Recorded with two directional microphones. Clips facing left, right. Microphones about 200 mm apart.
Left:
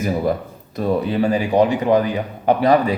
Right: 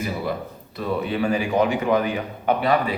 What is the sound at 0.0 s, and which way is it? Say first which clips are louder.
A man's voice: left 6 dB; 45° left (ahead or behind).